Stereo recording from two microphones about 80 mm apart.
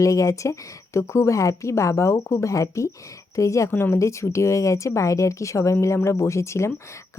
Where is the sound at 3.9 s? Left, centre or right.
Left.